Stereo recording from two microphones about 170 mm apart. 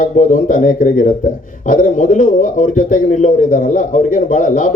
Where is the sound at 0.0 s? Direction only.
50° left (ahead or behind).